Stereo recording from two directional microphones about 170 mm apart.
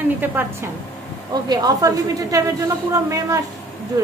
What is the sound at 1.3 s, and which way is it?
A woman's voice, 25° right (ahead or behind).